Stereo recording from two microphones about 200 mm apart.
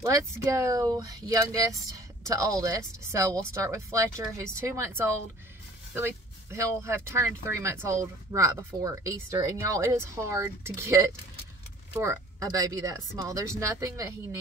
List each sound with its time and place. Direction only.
0.0 s speech: 15° right (ahead or behind)